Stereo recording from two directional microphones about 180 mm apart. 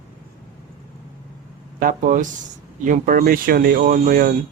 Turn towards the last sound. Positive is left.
turn(degrees=-50)  # may be behind; listen again after turning